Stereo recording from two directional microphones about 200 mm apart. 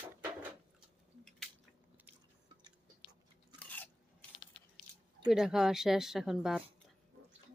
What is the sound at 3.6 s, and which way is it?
Biting, 10° left (ahead or behind).